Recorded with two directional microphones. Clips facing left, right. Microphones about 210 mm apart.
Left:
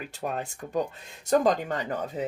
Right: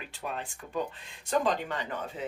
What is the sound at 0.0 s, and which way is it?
Speech, 45° left (ahead or behind).